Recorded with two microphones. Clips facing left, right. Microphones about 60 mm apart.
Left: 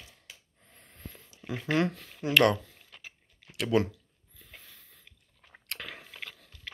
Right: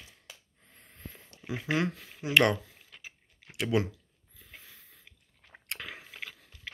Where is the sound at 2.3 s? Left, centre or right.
Right.